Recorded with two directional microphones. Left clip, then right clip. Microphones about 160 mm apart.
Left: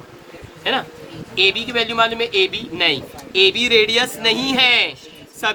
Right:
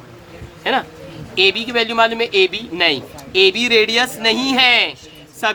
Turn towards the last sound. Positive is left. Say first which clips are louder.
# right 2 dB
turn(degrees=-65)  # may be behind; listen again after turning